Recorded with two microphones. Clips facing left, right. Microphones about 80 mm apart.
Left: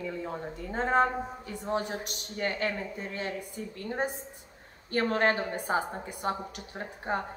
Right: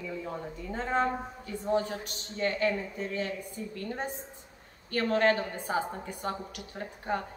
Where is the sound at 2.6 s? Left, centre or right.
Left.